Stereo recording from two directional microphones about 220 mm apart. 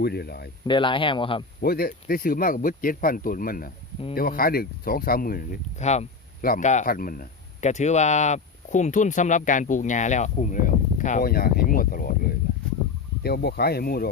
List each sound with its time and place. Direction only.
0.0 s speech: 45° left (ahead or behind)
0.7 s speech: 20° left (ahead or behind)
1.6 s speech: 45° left (ahead or behind)